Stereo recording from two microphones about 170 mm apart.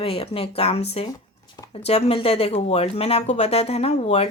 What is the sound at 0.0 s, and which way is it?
Speech, 35° left (ahead or behind).